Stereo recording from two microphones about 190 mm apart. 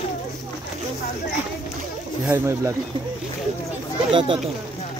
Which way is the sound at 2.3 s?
15° right (ahead or behind).